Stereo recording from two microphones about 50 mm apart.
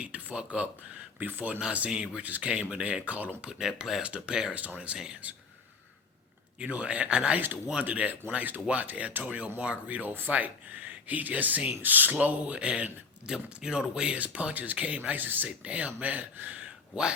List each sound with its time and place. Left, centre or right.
0.0 s speech: right
1.9 s speech: centre
2.2 s speech: right
3.4 s speech: centre
4.0 s speech: right
6.6 s speech: right
12.2 s speech: right
15.4 s speech: right